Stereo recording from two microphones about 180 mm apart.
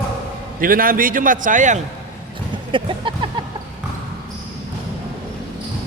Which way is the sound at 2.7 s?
25° right (ahead or behind).